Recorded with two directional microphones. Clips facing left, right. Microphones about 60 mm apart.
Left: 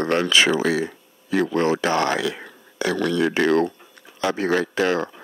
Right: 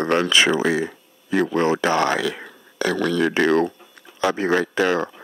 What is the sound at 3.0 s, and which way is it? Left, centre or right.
Speech, right.